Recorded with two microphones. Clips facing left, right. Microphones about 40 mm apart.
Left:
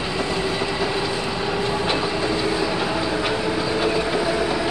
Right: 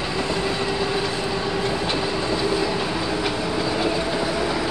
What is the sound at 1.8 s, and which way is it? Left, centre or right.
Train, left.